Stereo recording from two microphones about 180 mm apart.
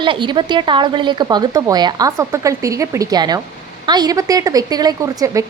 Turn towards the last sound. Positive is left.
turn(degrees=-20)  # may be behind; listen again after turning